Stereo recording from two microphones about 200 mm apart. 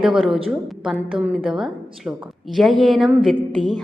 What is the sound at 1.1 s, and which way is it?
A woman's voice, 5° right (ahead or behind).